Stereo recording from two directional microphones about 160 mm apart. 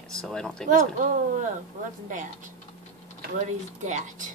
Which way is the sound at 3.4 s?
50° right (ahead or behind).